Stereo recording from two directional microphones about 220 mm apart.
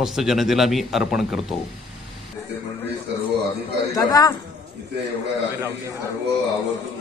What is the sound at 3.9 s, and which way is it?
Speech, 15° left (ahead or behind).